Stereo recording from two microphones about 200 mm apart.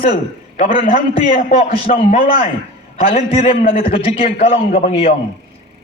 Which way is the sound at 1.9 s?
30° left (ahead or behind).